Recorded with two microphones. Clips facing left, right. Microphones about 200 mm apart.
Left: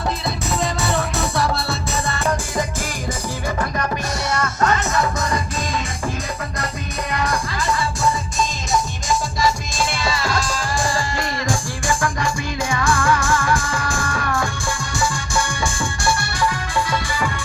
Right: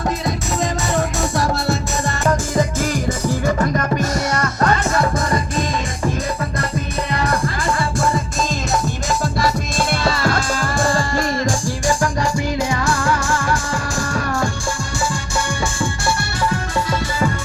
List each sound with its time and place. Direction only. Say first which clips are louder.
0.3 s music: right 2 dB; 40° right (ahead or behind)
7.4 s music: right 2 dB; 55° right (ahead or behind)
15.6 s music: right 1 dB; 40° right (ahead or behind)